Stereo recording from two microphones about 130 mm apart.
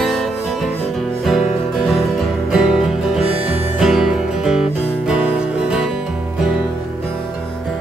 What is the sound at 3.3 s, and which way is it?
Music, 50° right (ahead or behind).